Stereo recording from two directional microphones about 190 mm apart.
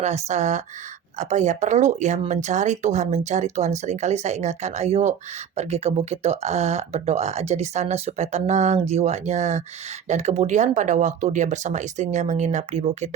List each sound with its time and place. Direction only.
0.0 s speech: 35° right (ahead or behind)